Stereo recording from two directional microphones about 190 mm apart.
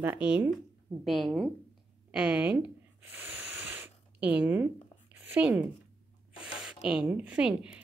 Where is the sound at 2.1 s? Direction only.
5° right (ahead or behind).